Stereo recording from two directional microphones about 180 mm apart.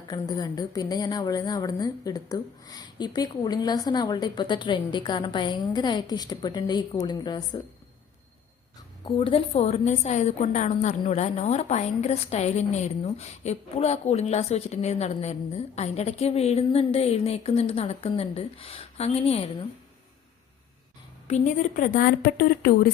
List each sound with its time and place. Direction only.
0.1 s a woman's voice: 20° left (ahead or behind)
9.0 s a woman's voice: 30° left (ahead or behind)
21.2 s speech: 40° left (ahead or behind)